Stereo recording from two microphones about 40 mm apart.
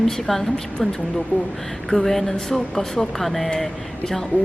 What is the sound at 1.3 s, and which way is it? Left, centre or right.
Speech, right.